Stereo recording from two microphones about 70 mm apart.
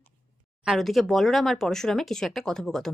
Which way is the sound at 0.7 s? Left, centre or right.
Centre.